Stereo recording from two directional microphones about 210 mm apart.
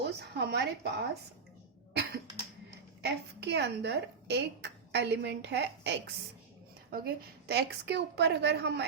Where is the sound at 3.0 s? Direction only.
55° right (ahead or behind).